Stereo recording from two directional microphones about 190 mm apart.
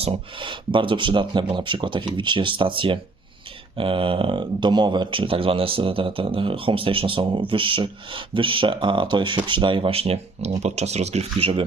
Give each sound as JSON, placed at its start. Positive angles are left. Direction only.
{"t": 0.0, "sound": "speech", "side_deg": -25}